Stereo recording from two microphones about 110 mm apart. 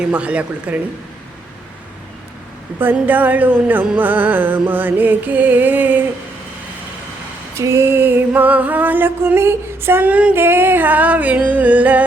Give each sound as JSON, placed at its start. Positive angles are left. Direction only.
{"t": 0.0, "sound": "music", "side_deg": -10}
{"t": 2.8, "sound": "music", "side_deg": -15}
{"t": 7.5, "sound": "music", "side_deg": -25}